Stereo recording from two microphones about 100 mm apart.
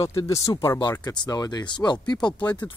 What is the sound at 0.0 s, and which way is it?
Speech, 30° left (ahead or behind).